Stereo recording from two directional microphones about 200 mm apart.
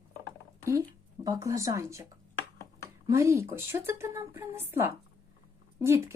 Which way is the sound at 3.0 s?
15° right (ahead or behind).